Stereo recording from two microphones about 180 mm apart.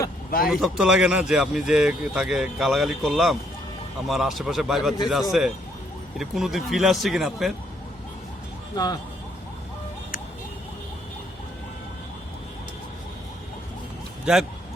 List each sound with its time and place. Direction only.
0.3 s speech: 55° left (ahead or behind)
0.5 s speech: centre (ahead or behind)
8.7 s speech: 20° left (ahead or behind)
14.3 s speech: 5° right (ahead or behind)